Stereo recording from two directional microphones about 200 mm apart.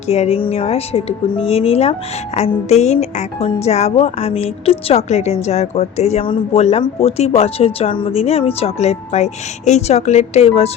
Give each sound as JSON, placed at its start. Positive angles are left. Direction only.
{"t": 0.1, "sound": "speech", "side_deg": 30}